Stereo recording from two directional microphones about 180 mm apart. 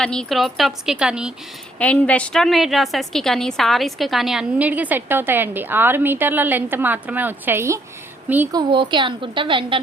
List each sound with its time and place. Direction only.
0.0 s a woman's voice: 5° left (ahead or behind)
1.8 s a woman's voice: 10° left (ahead or behind); by 7.8 s 15° right (ahead or behind)
8.5 s a woman's voice: 25° right (ahead or behind)